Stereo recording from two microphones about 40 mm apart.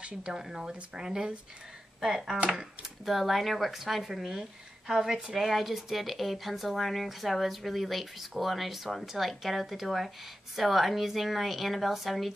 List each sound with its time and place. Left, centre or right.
0.0 s speech: right
0.4 s speech: centre